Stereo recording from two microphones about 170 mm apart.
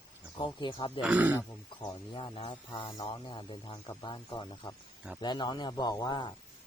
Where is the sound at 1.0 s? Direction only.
10° right (ahead or behind).